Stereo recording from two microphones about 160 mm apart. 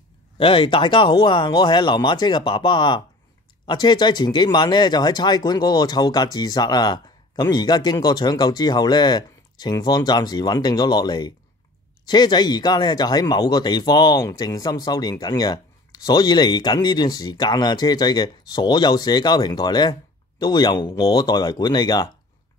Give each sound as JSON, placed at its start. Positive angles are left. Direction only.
{"t": 0.4, "sound": "speech", "side_deg": 35}